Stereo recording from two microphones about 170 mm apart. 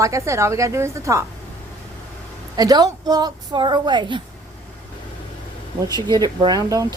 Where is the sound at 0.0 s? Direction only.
15° right (ahead or behind).